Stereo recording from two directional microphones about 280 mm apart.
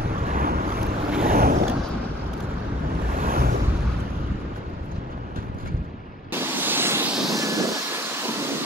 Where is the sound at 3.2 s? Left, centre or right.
Right.